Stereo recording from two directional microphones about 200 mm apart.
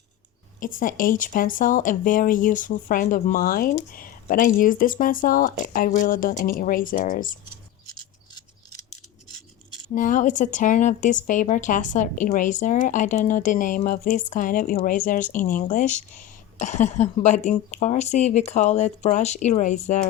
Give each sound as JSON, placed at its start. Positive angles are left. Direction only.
{"t": 0.6, "sound": "speech", "side_deg": 45}
{"t": 9.9, "sound": "speech", "side_deg": 40}